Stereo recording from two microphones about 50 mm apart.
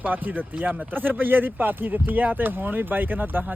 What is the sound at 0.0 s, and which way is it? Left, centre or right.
Speech, right.